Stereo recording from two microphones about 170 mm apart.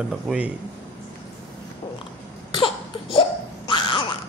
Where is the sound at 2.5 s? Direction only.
30° left (ahead or behind).